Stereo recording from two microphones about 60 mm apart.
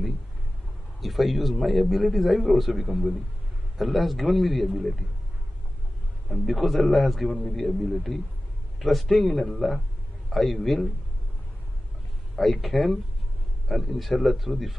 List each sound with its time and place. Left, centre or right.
1.0 s a man's voice: centre
6.2 s a man's voice: centre
12.4 s a man's voice: centre